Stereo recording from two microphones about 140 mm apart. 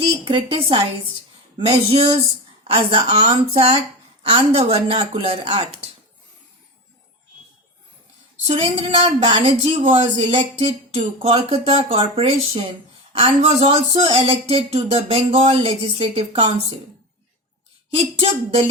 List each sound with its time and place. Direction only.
0.0 s a woman's voice: 40° right (ahead or behind)
8.4 s speech: 40° right (ahead or behind)
17.9 s speech: 45° right (ahead or behind)